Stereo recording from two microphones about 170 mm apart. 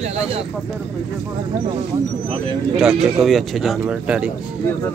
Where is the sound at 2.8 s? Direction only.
Centre (ahead or behind).